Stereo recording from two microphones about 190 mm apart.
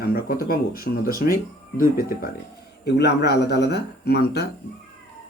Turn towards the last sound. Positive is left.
turn(degrees=60)  # may be behind; listen again after turning